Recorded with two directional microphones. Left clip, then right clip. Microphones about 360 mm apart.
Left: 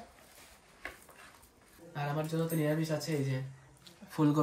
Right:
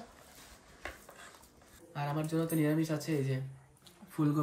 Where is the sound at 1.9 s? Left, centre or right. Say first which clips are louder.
Even; centre.